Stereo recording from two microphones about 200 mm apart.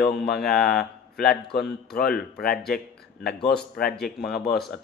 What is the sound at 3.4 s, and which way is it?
Mantra, 50° left (ahead or behind).